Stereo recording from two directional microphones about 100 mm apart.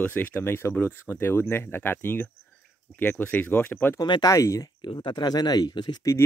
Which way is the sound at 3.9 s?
45° left (ahead or behind).